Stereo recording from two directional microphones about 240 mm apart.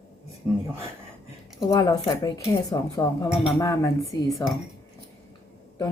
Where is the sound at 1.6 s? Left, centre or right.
Centre.